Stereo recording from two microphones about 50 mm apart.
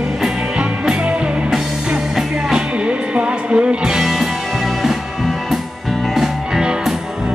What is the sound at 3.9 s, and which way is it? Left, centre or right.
Music, centre.